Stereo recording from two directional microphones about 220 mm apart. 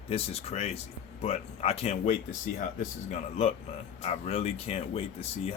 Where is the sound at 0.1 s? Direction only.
25° left (ahead or behind).